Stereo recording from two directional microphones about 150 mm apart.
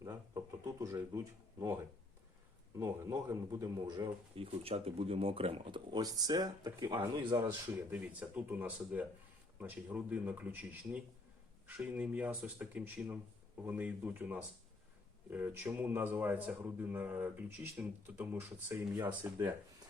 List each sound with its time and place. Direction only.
0.0 s a sound: 25° right (ahead or behind)
2.7 s speech: 20° right (ahead or behind)
7.9 s speech: 10° right (ahead or behind)